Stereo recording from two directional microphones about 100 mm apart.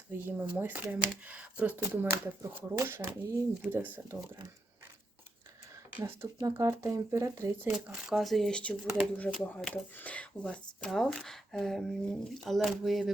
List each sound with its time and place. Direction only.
0.1 s speech: 20° right (ahead or behind)
6.0 s speech: 30° right (ahead or behind)
7.9 s speech: 5° right (ahead or behind); by 10.2 s 15° left (ahead or behind)
10.4 s speech: 5° left (ahead or behind)